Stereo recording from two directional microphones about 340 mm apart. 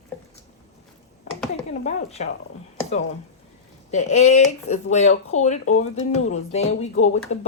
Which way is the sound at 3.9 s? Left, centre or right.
Centre.